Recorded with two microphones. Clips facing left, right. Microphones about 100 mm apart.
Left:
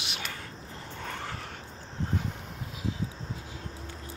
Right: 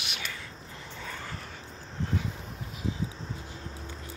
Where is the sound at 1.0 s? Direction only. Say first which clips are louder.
Left 3 dB; 60° left (ahead or behind).